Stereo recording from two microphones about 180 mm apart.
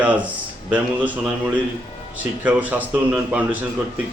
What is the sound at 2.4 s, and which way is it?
Speech, 10° right (ahead or behind).